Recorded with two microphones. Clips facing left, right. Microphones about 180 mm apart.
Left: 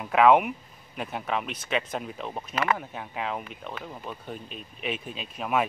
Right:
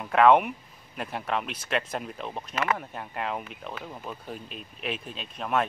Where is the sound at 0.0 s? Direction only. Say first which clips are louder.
Even; centre (ahead or behind).